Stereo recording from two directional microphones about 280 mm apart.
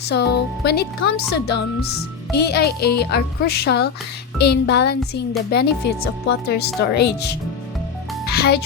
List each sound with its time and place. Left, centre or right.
0.1 s speech: left
8.3 s music: left